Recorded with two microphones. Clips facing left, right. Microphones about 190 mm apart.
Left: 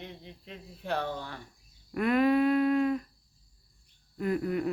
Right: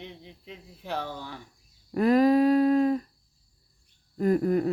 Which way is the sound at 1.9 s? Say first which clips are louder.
Right 4 dB; 35° right (ahead or behind).